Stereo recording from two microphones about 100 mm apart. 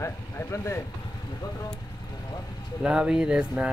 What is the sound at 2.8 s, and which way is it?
Speech, 10° right (ahead or behind).